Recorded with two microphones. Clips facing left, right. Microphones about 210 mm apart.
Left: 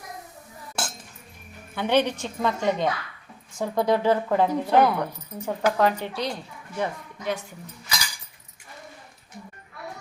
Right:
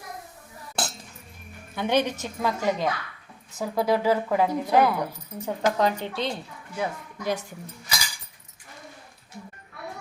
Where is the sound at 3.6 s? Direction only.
5° right (ahead or behind); by 6.4 s 25° right (ahead or behind).